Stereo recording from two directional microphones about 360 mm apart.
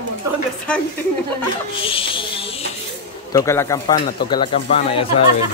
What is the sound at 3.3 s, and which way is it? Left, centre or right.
Speech, centre.